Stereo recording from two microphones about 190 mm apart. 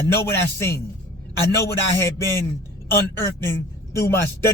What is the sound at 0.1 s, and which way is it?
A man's voice, 15° left (ahead or behind).